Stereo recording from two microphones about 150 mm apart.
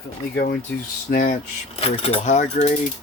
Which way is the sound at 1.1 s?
65° left (ahead or behind).